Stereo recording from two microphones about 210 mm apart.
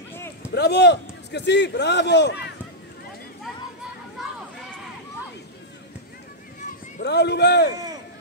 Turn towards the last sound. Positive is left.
turn(degrees=50)  # may be behind; listen again after turning